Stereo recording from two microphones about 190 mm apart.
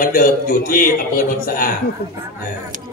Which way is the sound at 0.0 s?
45° left (ahead or behind).